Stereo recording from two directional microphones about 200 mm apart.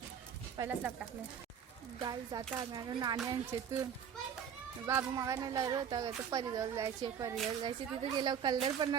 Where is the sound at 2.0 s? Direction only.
20° right (ahead or behind).